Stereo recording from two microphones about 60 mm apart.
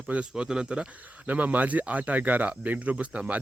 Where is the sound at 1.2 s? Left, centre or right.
Right.